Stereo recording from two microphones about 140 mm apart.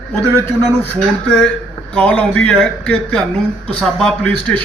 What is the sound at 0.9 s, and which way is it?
Speech, 5° left (ahead or behind).